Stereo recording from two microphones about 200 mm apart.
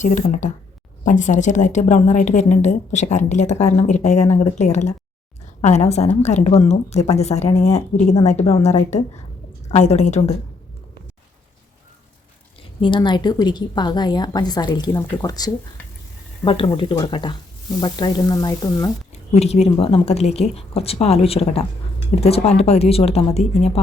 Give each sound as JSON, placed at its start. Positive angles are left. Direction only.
{"t": 0.0, "sound": "a woman's voice", "side_deg": 40}
{"t": 12.8, "sound": "a woman's voice", "side_deg": 25}
{"t": 19.1, "sound": "a woman's voice", "side_deg": 35}